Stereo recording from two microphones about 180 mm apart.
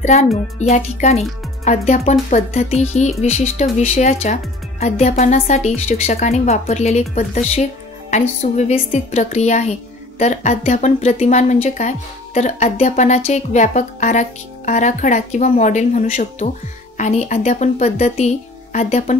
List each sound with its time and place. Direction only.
0.0 s music: 40° left (ahead or behind)
0.6 s speech: 40° left (ahead or behind)